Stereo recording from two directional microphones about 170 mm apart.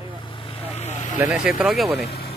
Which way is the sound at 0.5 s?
35° left (ahead or behind).